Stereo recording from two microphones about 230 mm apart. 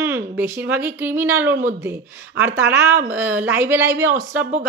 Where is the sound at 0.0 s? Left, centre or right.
Centre.